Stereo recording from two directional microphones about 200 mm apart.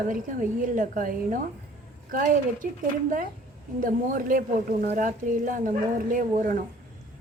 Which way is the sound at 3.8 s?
45° right (ahead or behind).